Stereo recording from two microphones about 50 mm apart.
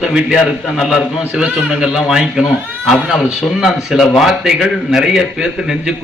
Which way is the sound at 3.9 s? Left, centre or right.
Centre.